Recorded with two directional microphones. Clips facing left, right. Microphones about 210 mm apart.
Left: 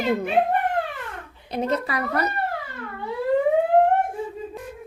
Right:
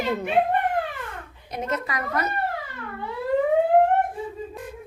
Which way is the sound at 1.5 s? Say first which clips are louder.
Left 4 dB; 35° left (ahead or behind).